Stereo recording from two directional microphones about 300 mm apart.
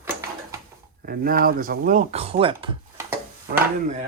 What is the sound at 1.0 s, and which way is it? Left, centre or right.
Speech, right.